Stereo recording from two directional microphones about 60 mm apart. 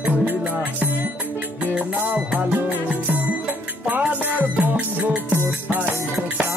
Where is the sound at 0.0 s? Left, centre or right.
Right.